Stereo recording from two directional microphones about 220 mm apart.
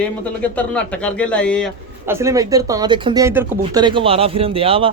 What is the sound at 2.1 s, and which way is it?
Speech, 10° right (ahead or behind).